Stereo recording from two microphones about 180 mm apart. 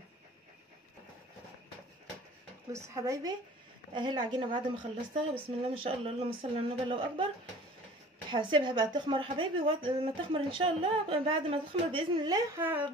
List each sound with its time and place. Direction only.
2.7 s a woman's voice: 15° right (ahead or behind)
8.3 s a woman's voice: 25° right (ahead or behind)